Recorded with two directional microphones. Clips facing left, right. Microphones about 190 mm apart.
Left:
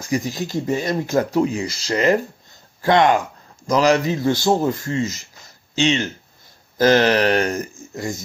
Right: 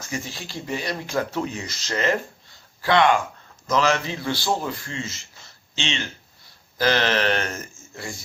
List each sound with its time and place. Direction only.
0.0 s a man's voice: 40° left (ahead or behind)